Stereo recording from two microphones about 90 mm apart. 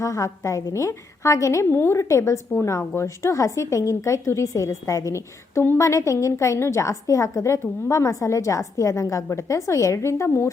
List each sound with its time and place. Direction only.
0.0 s a woman's voice: 35° left (ahead or behind)